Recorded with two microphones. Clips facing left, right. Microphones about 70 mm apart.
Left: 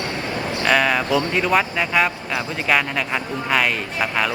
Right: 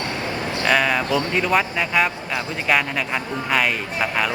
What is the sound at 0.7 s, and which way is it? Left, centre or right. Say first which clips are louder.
A man's voice: left 1 dB; centre.